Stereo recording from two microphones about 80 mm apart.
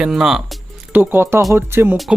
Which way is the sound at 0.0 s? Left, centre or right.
Centre.